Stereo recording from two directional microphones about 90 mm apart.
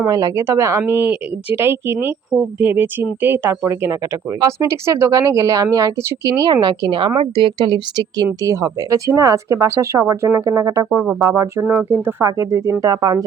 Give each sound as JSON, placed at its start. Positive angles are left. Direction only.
{"t": 0.1, "sound": "speech", "side_deg": -40}
{"t": 2.3, "sound": "speech", "side_deg": -10}
{"t": 2.6, "sound": "a woman's voice", "side_deg": -25}
{"t": 8.4, "sound": "speech", "side_deg": -40}
{"t": 11.6, "sound": "speech", "side_deg": -20}
{"t": 12.4, "sound": "speech", "side_deg": -35}
{"t": 12.8, "sound": "a woman's voice", "side_deg": -45}